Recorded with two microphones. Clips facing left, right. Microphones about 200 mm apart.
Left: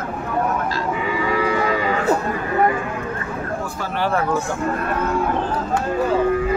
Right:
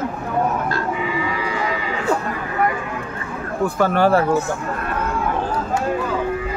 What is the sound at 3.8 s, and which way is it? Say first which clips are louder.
Speech: right 8 dB; 45° right (ahead or behind).